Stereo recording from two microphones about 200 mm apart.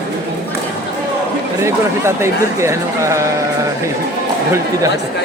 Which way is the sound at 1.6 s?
15° right (ahead or behind).